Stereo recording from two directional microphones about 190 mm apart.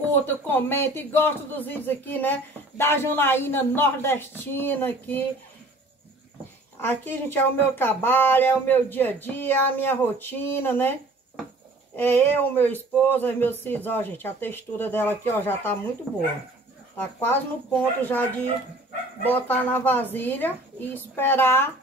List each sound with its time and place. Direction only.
0.1 s speech: 10° left (ahead or behind)
6.8 s speech: 10° left (ahead or behind)
17.0 s speech: 10° left (ahead or behind)